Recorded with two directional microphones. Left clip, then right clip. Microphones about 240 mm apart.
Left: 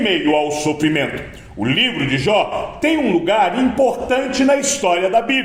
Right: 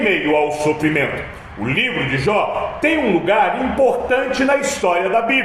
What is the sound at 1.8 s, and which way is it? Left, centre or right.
A man's voice, left.